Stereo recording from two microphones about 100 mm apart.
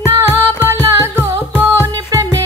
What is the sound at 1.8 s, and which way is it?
Music, 35° right (ahead or behind).